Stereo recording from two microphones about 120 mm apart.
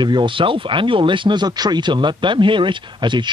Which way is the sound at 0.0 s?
40° right (ahead or behind).